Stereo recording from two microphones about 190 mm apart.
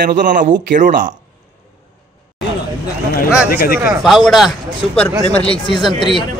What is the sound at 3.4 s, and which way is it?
Speech, 50° left (ahead or behind).